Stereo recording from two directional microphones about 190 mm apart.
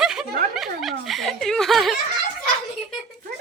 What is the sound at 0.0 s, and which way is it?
Snicker, centre (ahead or behind).